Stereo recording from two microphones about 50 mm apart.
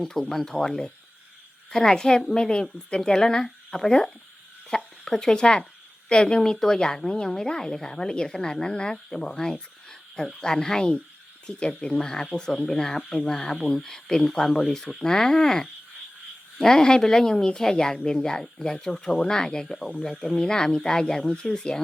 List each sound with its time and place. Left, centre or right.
0.0 s a woman's voice: centre